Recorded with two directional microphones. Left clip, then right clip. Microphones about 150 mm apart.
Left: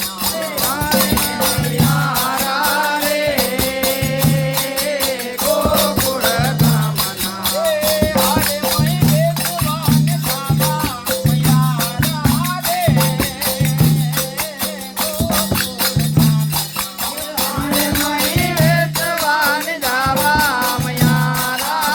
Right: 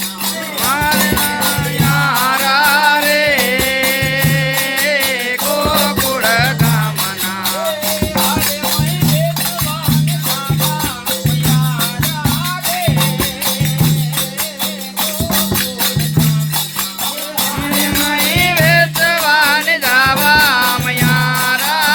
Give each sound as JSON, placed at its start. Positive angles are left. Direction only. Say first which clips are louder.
{"t": 2.5, "sound": "music", "louder": "right 7 dB", "side_deg": 0}
{"t": 18.7, "sound": "music", "louder": "right 6 dB", "side_deg": 20}